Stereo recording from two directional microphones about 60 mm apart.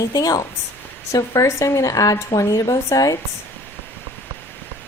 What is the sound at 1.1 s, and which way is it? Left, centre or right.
Speech, left.